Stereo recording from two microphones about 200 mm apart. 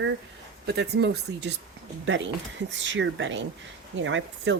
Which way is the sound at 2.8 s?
65° right (ahead or behind).